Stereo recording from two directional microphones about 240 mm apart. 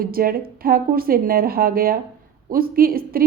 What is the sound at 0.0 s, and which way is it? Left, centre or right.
A woman's voice, right.